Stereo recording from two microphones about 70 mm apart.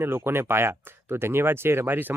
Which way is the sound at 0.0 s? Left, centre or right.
Right.